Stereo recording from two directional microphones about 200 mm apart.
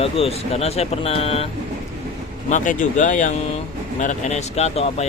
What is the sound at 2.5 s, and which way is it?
A man's voice, 40° left (ahead or behind).